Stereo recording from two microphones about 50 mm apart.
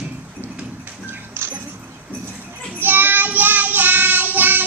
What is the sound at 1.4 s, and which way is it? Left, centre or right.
Music, right.